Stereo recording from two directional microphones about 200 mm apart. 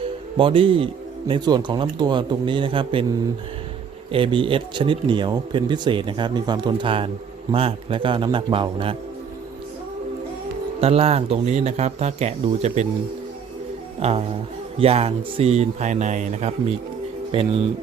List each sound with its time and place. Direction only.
0.3 s speech: 25° right (ahead or behind)
4.1 s speech: 25° right (ahead or behind)
10.8 s speech: 30° right (ahead or behind)
14.0 s speech: 30° right (ahead or behind)